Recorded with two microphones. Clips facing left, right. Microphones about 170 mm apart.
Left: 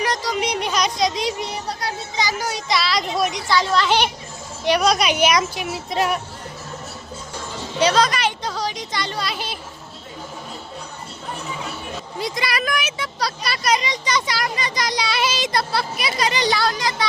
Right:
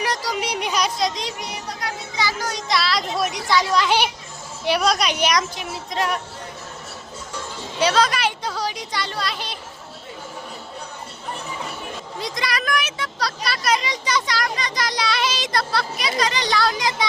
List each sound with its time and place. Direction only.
0.0 s music: 10° right (ahead or behind)
1.4 s a child's voice: 30° left (ahead or behind)
2.1 s a sound: 15° left (ahead or behind)
3.5 s speech: 15° right (ahead or behind); by 6.1 s 10° left (ahead or behind)
7.8 s a sound: 5° right (ahead or behind)
12.2 s speech: 5° left (ahead or behind)
14.3 s speech: 5° left (ahead or behind)
16.7 s a woman's voice: 20° right (ahead or behind)